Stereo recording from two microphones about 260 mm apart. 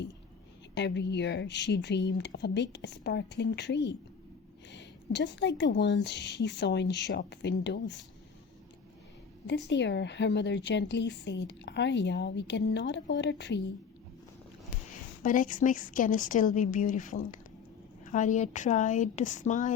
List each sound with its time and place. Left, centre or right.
0.7 s speech: left
9.5 s speech: left
15.2 s a woman's voice: left